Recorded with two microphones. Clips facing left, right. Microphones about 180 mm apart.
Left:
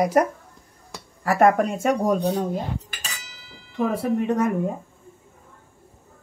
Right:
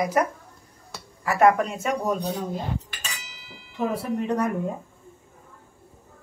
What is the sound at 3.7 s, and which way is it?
Speech, 50° left (ahead or behind).